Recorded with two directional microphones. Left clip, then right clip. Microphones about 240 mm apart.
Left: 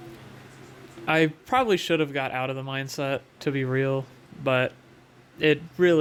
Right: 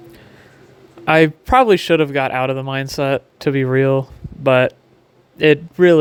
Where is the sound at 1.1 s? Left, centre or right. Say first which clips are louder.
Right 10 dB; right.